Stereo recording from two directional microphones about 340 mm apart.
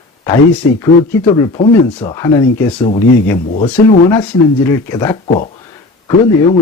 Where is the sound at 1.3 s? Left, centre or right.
Centre.